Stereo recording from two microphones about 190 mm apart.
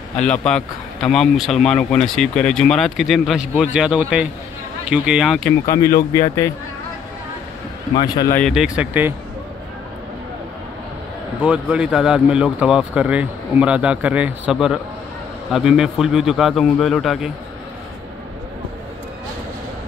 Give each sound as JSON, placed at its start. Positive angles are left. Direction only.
{"t": 0.1, "sound": "a man's voice", "side_deg": 5}
{"t": 5.7, "sound": "speech", "side_deg": 15}
{"t": 7.9, "sound": "speech", "side_deg": 20}
{"t": 8.4, "sound": "a man's voice", "side_deg": 0}
{"t": 11.4, "sound": "a man's voice", "side_deg": -5}